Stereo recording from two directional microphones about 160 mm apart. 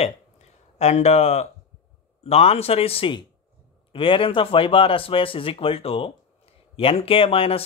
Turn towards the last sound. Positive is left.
turn(degrees=35)  # may be behind; listen again after turning